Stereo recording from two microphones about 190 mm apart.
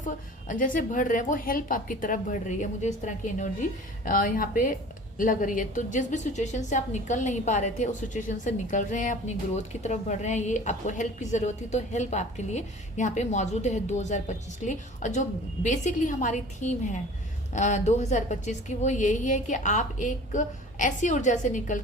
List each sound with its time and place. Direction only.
0.0 s a woman's voice: 45° left (ahead or behind)